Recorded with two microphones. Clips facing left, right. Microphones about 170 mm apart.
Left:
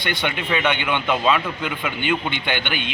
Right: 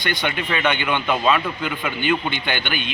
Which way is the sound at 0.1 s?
20° left (ahead or behind).